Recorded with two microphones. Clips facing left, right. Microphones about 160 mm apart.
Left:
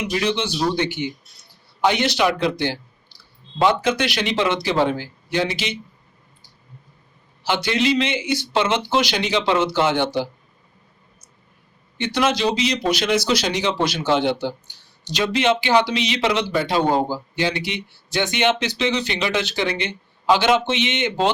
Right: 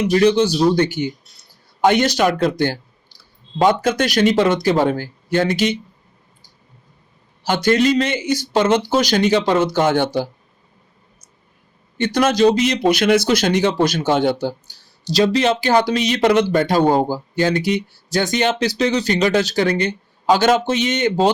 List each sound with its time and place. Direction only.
0.0 s speech: 40° right (ahead or behind)
7.4 s speech: 45° right (ahead or behind)
11.9 s speech: 45° right (ahead or behind)